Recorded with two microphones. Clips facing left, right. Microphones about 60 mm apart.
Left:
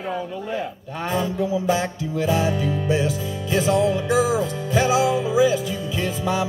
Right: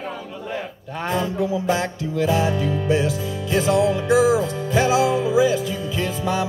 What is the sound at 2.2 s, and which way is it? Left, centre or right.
Speech, left.